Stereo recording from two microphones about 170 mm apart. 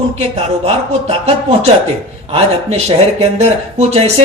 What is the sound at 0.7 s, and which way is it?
A woman's voice, 35° right (ahead or behind).